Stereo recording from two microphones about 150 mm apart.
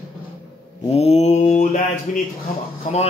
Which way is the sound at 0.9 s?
45° left (ahead or behind).